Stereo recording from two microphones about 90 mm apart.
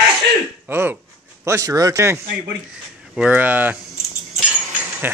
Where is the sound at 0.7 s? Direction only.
25° right (ahead or behind).